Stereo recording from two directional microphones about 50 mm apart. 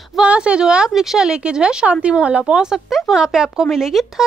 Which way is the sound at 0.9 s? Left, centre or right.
Centre.